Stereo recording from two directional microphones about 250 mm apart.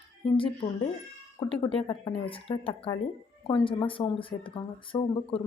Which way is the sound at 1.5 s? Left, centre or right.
Left.